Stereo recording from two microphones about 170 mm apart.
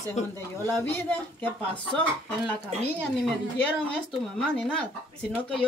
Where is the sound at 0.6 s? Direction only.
10° left (ahead or behind).